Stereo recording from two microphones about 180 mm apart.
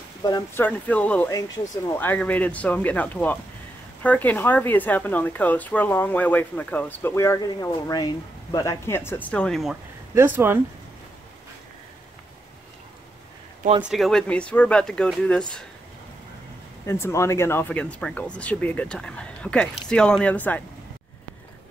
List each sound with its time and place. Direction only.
0.2 s speech: 20° left (ahead or behind)
0.7 s speech: 10° left (ahead or behind)
10.1 s speech: 10° right (ahead or behind)
13.8 s speech: centre (ahead or behind)
16.8 s speech: 15° left (ahead or behind)